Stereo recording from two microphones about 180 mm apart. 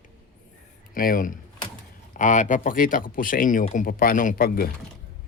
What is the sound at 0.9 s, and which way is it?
Speech, 50° left (ahead or behind).